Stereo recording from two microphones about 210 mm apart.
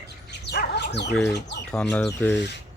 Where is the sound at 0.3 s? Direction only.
50° left (ahead or behind).